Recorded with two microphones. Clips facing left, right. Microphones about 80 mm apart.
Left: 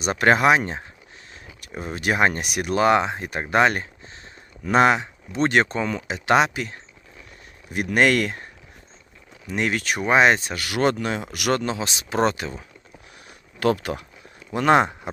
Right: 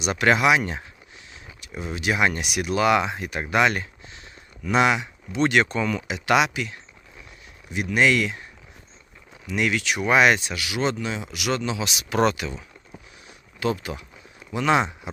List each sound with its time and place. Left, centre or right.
0.0 s speech: left
7.7 s speech: left
9.5 s speech: left
10.1 s speech: left
13.2 s a sound: left
14.5 s speech: left